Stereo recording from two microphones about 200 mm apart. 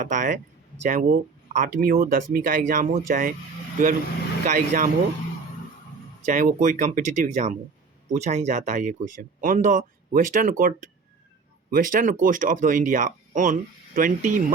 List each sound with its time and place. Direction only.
0.0 s speech: 40° right (ahead or behind)
4.4 s speech: 40° right (ahead or behind)
6.2 s speech: 40° right (ahead or behind)